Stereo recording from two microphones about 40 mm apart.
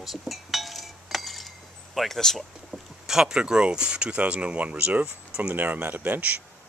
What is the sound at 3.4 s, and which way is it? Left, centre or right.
Speech, right.